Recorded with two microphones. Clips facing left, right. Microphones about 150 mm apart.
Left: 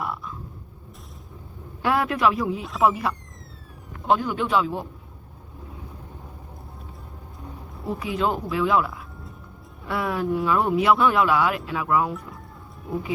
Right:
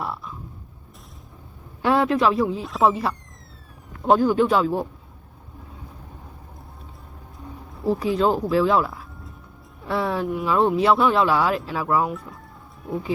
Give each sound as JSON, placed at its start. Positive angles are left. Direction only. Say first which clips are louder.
{"t": 1.8, "sound": "speech", "louder": "right 3 dB", "side_deg": -25}
{"t": 2.6, "sound": "speech", "louder": "even", "side_deg": 0}
{"t": 4.0, "sound": "speech", "louder": "right 5 dB", "side_deg": -35}
{"t": 7.9, "sound": "speech", "louder": "right 3 dB", "side_deg": -35}